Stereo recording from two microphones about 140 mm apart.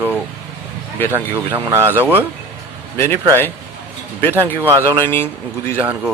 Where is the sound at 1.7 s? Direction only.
15° right (ahead or behind).